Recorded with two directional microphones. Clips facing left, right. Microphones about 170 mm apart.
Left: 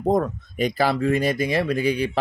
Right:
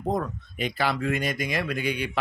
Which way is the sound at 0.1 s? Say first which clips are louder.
Left 7 dB; 40° left (ahead or behind).